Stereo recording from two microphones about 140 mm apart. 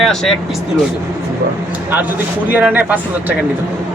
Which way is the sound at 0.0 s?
Centre (ahead or behind).